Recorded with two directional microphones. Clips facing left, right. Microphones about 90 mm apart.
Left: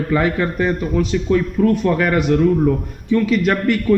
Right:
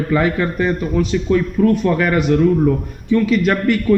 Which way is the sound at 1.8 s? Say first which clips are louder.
Right 1 dB; 35° left (ahead or behind).